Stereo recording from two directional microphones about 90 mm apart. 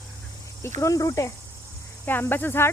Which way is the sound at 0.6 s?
35° left (ahead or behind).